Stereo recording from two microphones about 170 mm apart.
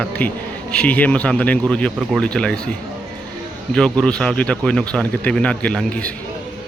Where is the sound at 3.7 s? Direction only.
5° left (ahead or behind).